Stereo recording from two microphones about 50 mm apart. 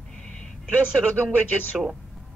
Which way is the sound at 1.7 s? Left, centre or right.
Centre.